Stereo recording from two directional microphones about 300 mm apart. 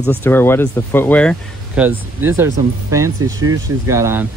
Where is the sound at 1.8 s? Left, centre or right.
Centre.